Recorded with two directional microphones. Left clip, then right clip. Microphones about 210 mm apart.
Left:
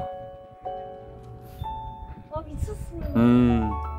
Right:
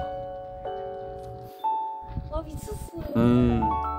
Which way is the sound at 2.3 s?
50° right (ahead or behind).